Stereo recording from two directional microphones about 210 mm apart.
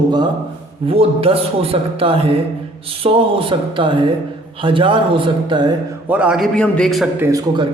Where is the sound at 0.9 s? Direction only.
25° right (ahead or behind).